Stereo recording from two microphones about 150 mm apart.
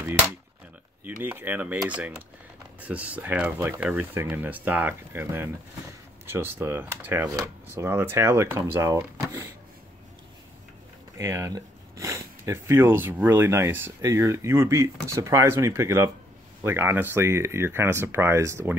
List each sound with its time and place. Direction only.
1.2 s speech: 15° right (ahead or behind)
11.1 s speech: 20° right (ahead or behind)